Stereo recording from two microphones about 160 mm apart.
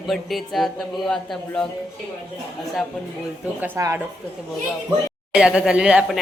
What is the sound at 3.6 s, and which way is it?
Speech, 15° right (ahead or behind).